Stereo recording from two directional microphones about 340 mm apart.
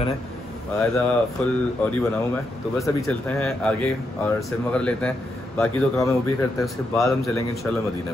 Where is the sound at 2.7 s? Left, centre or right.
Centre.